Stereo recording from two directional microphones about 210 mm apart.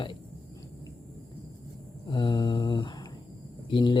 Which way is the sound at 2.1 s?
20° left (ahead or behind).